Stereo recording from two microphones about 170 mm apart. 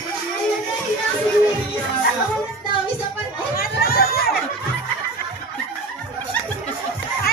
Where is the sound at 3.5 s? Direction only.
60° left (ahead or behind).